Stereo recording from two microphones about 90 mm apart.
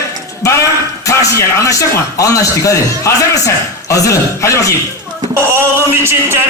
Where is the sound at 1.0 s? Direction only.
35° left (ahead or behind).